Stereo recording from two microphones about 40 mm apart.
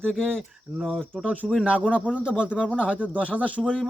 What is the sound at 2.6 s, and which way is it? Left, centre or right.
Speech, left.